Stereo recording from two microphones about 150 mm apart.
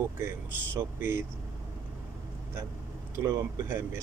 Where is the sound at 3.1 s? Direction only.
15° right (ahead or behind).